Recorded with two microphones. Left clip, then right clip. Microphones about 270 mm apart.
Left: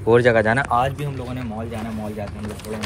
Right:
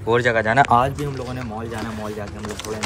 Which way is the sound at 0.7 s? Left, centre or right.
Right.